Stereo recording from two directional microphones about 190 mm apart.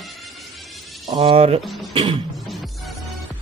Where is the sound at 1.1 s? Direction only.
30° right (ahead or behind).